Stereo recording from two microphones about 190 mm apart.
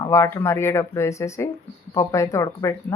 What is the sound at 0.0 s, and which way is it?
Speech, 15° left (ahead or behind).